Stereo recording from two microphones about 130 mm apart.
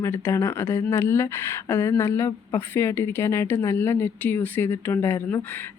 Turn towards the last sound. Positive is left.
turn(degrees=15)  # may be behind; listen again after turning